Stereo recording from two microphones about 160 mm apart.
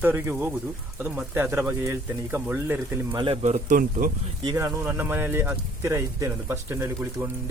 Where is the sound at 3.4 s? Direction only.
45° right (ahead or behind).